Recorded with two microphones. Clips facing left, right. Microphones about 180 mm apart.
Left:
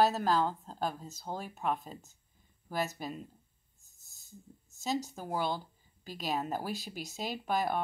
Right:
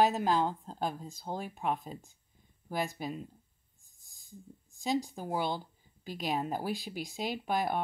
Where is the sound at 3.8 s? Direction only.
15° right (ahead or behind).